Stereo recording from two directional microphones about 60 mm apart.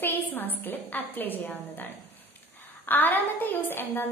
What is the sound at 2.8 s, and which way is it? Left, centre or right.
A woman's voice, left.